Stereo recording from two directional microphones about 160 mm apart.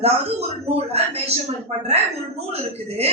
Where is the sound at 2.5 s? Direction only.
40° right (ahead or behind).